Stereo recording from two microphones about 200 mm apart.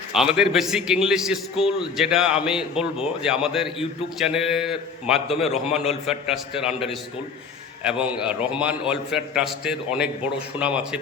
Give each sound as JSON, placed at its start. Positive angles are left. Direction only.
{"t": 0.1, "sound": "a man's voice", "side_deg": 0}
{"t": 7.9, "sound": "a man's voice", "side_deg": -5}